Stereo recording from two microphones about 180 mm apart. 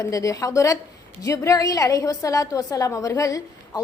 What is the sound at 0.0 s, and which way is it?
A woman's voice, 20° left (ahead or behind).